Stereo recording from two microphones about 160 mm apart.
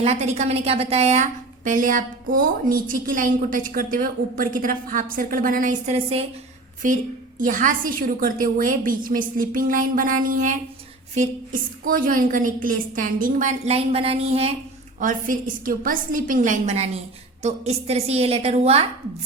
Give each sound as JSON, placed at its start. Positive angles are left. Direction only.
{"t": 0.0, "sound": "a woman's voice", "side_deg": -40}
{"t": 6.8, "sound": "a woman's voice", "side_deg": -55}
{"t": 11.9, "sound": "a woman's voice", "side_deg": -60}
{"t": 13.7, "sound": "a woman's voice", "side_deg": -40}
{"t": 14.9, "sound": "a woman's voice", "side_deg": -55}